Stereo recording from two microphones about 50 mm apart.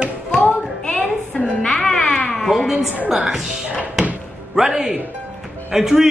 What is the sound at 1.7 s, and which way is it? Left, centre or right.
Music, centre.